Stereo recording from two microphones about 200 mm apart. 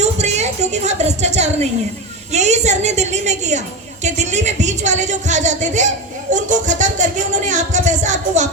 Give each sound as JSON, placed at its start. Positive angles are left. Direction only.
{"t": 0.0, "sound": "a woman's voice", "side_deg": -35}